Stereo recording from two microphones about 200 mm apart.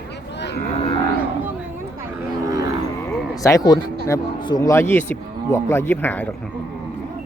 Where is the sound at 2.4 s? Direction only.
15° right (ahead or behind).